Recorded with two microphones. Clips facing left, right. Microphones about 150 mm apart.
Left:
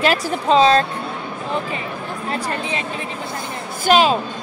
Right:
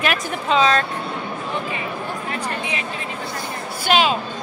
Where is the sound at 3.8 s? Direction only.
40° left (ahead or behind).